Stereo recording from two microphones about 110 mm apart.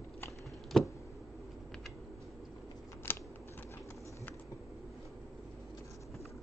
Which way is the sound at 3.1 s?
20° left (ahead or behind).